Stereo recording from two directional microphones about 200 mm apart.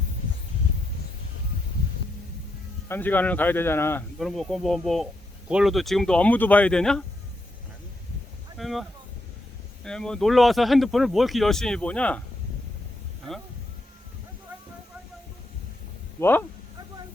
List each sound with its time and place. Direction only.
2.9 s speech: 10° left (ahead or behind)
4.2 s speech: centre (ahead or behind)
8.5 s a sound: centre (ahead or behind)
9.8 s speech: 5° left (ahead or behind)
16.2 s speech: 10° left (ahead or behind)